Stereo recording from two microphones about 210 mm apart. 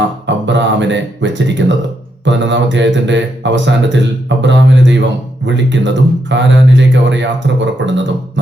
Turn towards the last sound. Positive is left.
turn(degrees=-55)  # may be behind; listen again after turning